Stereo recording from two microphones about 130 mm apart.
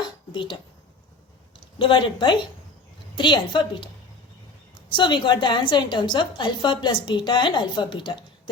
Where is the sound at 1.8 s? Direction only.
40° left (ahead or behind).